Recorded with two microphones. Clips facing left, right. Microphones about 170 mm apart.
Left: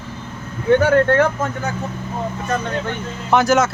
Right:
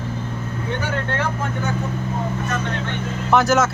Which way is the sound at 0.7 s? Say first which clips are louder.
Left 13 dB; 50° left (ahead or behind).